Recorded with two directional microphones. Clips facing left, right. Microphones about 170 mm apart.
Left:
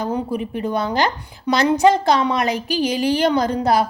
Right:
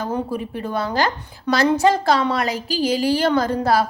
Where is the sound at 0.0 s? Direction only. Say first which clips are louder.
Left 2 dB; 15° left (ahead or behind).